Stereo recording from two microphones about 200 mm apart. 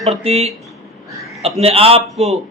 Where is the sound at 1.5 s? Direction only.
30° right (ahead or behind).